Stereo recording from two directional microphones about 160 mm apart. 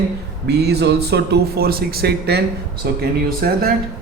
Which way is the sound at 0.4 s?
90° right.